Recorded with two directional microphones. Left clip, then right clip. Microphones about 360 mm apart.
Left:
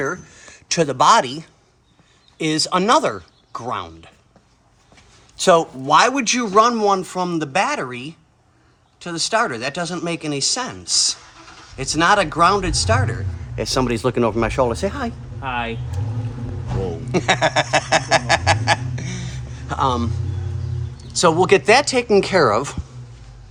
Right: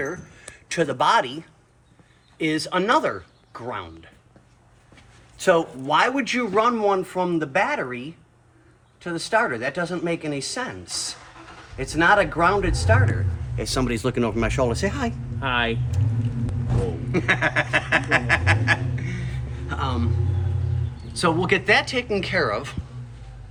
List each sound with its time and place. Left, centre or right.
0.3 s a man's voice: left
5.4 s a man's voice: centre
17.1 s honk: centre
21.1 s a man's voice: centre